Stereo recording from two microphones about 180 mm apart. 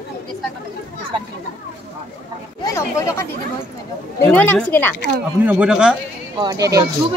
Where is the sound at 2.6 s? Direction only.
15° left (ahead or behind).